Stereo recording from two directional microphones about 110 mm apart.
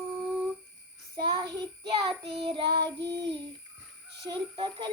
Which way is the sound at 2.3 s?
55° right (ahead or behind).